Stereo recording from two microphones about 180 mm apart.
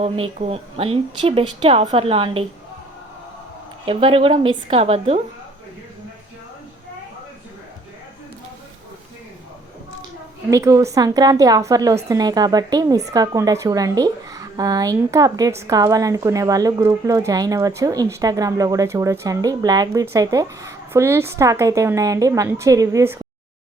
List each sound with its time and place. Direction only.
0.0 s speech: 35° right (ahead or behind)
3.8 s speech: 30° right (ahead or behind)
10.5 s a woman's voice: 15° right (ahead or behind)